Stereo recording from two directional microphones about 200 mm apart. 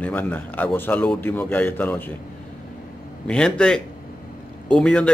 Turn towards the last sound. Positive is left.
turn(degrees=5)  # may be behind; listen again after turning